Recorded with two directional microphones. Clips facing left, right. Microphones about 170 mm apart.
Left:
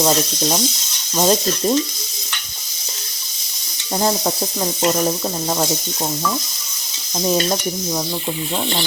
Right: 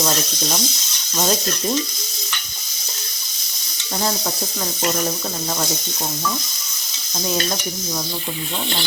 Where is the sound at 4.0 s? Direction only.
35° left (ahead or behind).